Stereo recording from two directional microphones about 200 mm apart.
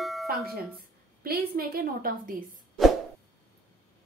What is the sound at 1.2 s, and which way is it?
A woman's voice, 50° right (ahead or behind).